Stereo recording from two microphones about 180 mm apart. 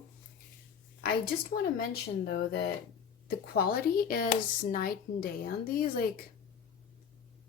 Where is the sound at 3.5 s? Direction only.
55° left (ahead or behind).